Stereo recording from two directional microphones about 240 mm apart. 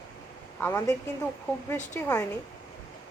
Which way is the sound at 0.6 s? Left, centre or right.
Centre.